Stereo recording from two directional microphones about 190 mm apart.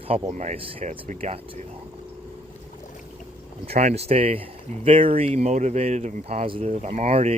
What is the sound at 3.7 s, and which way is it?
Speech, 35° right (ahead or behind).